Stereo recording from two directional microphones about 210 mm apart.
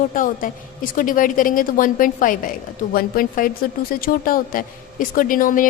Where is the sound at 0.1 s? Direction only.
40° left (ahead or behind).